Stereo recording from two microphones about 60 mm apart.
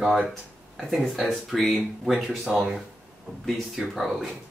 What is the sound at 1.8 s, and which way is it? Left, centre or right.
Speech, centre.